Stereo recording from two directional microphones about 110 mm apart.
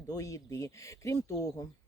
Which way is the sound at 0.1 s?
30° left (ahead or behind).